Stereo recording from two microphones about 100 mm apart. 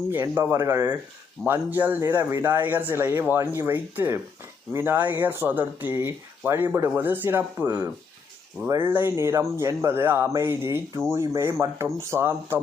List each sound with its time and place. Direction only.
0.1 s speech: 20° right (ahead or behind)
1.4 s speech: 5° left (ahead or behind)
1.7 s speech: 15° right (ahead or behind)
2.0 s speech: 30° right (ahead or behind)
2.4 s speech: 20° right (ahead or behind)